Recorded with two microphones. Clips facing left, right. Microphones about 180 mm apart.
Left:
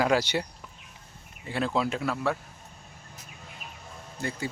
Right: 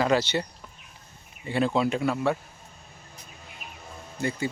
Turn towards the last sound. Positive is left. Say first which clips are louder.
# right 4 dB
turn(degrees=0)  # may be behind; listen again after turning